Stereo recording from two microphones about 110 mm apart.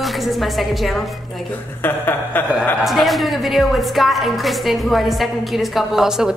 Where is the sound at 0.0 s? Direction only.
Centre (ahead or behind).